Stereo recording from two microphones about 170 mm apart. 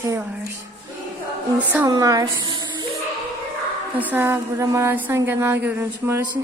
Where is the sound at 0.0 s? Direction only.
15° right (ahead or behind).